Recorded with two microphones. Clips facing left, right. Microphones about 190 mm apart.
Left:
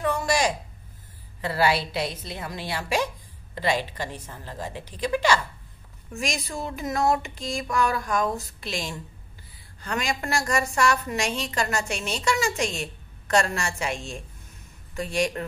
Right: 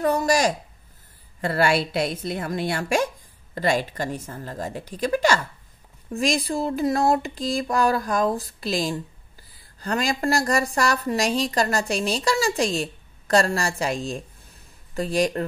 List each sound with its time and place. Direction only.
0.0 s a woman's voice: 40° right (ahead or behind)
1.4 s a woman's voice: 50° right (ahead or behind)
6.1 s a woman's voice: 35° right (ahead or behind)